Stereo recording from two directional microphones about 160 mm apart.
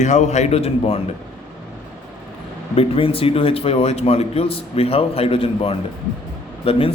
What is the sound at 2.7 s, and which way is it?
Speech, 35° left (ahead or behind).